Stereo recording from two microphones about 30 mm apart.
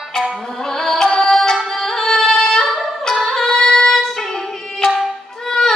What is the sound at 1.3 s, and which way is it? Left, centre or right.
Music, centre.